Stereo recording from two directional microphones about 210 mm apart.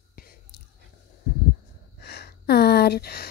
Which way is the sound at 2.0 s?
50° left (ahead or behind).